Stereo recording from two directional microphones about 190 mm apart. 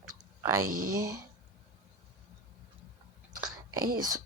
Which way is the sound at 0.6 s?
45° right (ahead or behind).